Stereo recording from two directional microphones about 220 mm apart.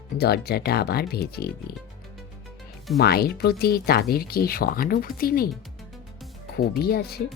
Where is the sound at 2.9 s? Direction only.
45° left (ahead or behind).